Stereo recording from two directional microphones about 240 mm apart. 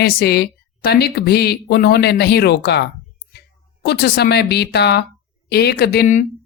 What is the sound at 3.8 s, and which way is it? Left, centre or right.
Speech, left.